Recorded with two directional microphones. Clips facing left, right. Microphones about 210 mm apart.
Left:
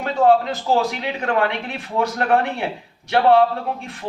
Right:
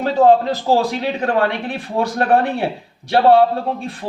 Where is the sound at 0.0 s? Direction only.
35° right (ahead or behind).